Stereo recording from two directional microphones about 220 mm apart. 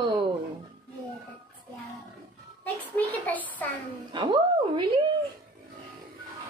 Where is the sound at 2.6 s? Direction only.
5° left (ahead or behind).